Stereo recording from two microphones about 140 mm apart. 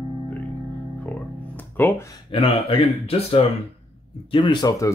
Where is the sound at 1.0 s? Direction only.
15° left (ahead or behind).